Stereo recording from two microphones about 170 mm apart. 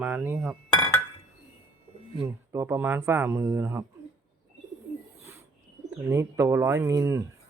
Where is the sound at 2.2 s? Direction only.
15° right (ahead or behind).